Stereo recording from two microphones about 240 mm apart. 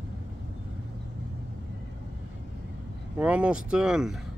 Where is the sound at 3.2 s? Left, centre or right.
Centre.